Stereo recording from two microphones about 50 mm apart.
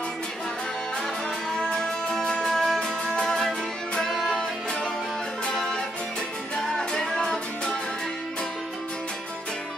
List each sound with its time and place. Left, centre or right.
1.6 s music: centre
5.5 s music: centre
6.8 s music: centre